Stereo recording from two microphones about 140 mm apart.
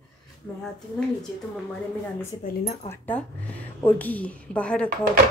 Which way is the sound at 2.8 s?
15° left (ahead or behind).